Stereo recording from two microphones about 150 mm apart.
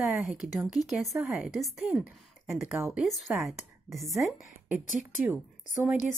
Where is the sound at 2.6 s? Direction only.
10° right (ahead or behind).